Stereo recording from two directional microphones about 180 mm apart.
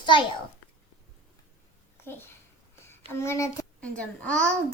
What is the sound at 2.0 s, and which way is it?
A child's voice, 10° left (ahead or behind).